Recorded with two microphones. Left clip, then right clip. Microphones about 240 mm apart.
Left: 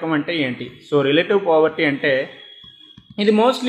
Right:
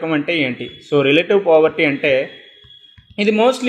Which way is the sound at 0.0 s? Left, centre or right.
Centre.